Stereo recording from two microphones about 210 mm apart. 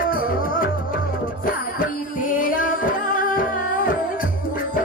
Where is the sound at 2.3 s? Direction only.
40° left (ahead or behind).